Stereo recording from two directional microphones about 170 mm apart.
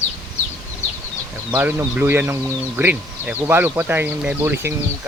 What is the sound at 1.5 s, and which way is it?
Speech, 10° right (ahead or behind).